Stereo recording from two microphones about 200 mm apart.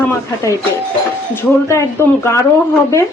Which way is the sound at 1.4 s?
15° left (ahead or behind).